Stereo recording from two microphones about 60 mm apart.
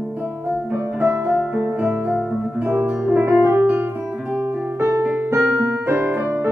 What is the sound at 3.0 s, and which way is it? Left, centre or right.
Music, right.